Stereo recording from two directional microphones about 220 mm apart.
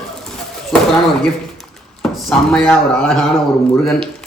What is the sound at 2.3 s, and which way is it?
Speech, 5° left (ahead or behind).